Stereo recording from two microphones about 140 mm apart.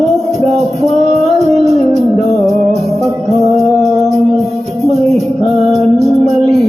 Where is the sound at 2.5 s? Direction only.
50° right (ahead or behind).